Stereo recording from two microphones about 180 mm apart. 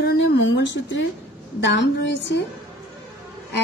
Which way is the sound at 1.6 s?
80° left.